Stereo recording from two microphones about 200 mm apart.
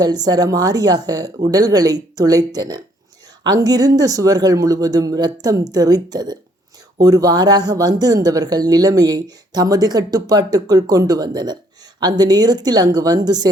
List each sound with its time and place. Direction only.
0.0 s speech: 20° right (ahead or behind)